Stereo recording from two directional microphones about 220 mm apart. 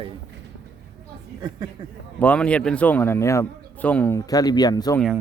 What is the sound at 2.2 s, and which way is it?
A man's voice, 5° left (ahead or behind).